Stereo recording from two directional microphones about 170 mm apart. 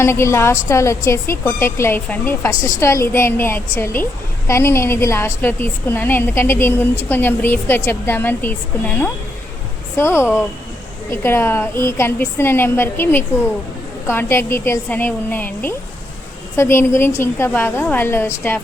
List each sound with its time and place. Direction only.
0.0 s a woman's voice: 15° left (ahead or behind)